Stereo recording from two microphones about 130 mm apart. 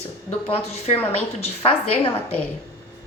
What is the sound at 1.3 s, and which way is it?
A woman's voice, 50° left (ahead or behind).